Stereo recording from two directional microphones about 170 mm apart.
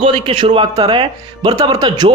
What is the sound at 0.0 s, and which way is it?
Speech, 30° right (ahead or behind).